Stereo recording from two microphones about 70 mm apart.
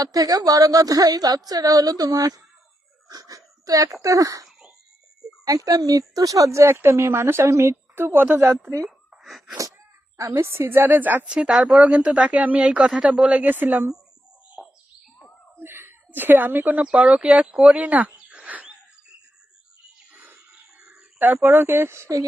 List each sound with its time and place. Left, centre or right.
0.0 s a woman's voice: right
3.1 s a sound: right
4.0 s a woman's voice: right
5.5 s a woman's voice: right
9.0 s wail: centre
10.2 s a woman's voice: right
10.7 s speech: right
11.3 s speech: centre
14.6 s bird: centre
15.6 s a woman's voice: right
16.8 s a sound: centre
21.4 s speech: right